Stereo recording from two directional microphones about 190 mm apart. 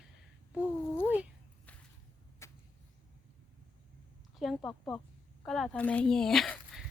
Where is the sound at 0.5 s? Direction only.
5° right (ahead or behind).